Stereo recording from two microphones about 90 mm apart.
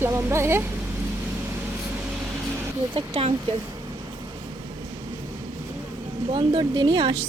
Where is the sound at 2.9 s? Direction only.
60° right (ahead or behind).